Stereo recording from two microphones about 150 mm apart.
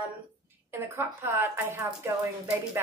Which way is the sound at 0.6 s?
15° right (ahead or behind).